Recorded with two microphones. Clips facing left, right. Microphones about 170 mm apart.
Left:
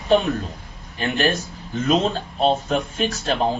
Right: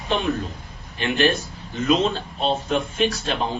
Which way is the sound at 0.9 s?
40° left (ahead or behind).